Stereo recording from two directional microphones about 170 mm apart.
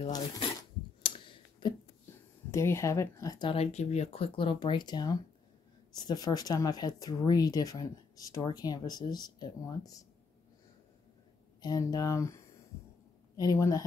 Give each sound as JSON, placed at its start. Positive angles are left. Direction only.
{"t": 1.0, "sound": "clicking", "side_deg": 30}
{"t": 2.5, "sound": "speech", "side_deg": 15}
{"t": 11.6, "sound": "speech", "side_deg": 20}
{"t": 13.4, "sound": "speech", "side_deg": 20}